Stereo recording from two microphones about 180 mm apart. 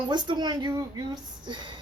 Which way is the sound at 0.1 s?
25° right (ahead or behind).